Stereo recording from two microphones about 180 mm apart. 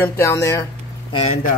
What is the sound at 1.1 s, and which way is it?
Speech, 30° left (ahead or behind).